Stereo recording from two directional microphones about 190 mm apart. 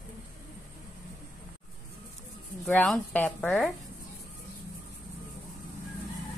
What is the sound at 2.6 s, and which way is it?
Speech, 5° left (ahead or behind).